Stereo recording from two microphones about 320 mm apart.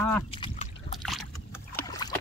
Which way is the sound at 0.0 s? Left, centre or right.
Centre.